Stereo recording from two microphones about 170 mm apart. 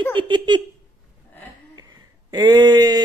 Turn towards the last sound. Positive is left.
turn(degrees=-25)  # may be behind; listen again after turning